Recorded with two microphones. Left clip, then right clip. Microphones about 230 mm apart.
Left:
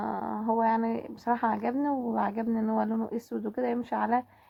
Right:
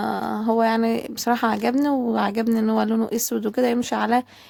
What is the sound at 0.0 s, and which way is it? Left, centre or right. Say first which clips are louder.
Speech: right 7 dB; right.